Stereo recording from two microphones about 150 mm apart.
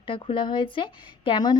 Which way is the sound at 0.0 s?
35° left (ahead or behind).